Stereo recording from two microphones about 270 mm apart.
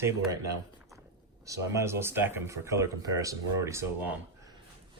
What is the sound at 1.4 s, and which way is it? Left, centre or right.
Speech, centre.